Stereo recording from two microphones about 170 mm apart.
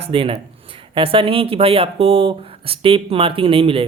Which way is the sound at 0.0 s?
30° right (ahead or behind).